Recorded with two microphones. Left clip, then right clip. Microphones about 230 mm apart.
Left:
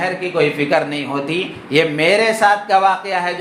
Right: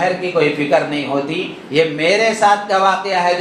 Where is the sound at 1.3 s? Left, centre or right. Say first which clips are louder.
Left 2 dB; left.